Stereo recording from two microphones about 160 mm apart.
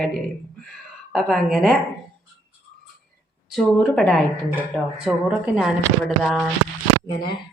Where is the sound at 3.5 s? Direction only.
5° left (ahead or behind).